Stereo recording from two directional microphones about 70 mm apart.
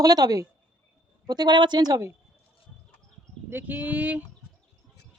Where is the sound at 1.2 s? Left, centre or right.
Right.